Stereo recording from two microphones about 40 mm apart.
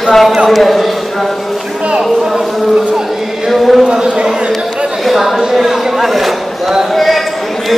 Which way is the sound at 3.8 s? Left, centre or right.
Right.